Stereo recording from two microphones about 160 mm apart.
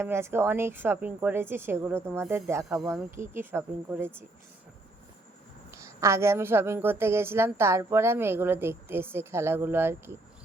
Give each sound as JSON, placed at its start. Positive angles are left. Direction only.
{"t": 0.0, "sound": "a woman's voice", "side_deg": -15}
{"t": 5.7, "sound": "a woman's voice", "side_deg": -20}